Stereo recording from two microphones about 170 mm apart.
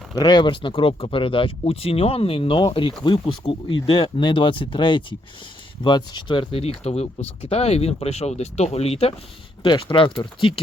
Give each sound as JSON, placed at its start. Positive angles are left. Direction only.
{"t": 0.2, "sound": "speech", "side_deg": 25}